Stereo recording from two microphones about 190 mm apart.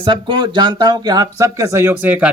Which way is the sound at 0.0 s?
25° right (ahead or behind).